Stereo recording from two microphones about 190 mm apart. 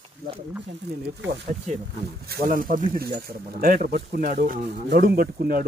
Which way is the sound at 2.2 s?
50° right (ahead or behind).